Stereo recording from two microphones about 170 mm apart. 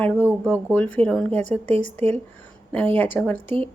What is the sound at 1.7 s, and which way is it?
Speech, 35° right (ahead or behind).